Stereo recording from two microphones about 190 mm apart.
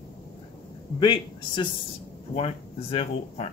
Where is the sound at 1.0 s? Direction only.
20° left (ahead or behind).